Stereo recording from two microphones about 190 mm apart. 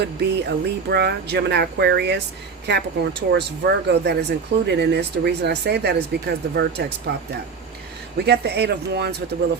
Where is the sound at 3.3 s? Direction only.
65° right (ahead or behind).